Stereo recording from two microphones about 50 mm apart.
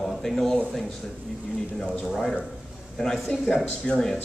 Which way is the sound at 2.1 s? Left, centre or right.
Centre.